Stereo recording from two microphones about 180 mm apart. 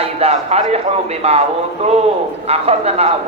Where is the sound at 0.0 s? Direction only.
35° right (ahead or behind).